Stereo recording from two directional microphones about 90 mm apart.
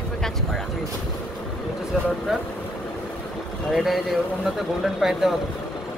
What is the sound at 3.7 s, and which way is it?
Speech, centre (ahead or behind).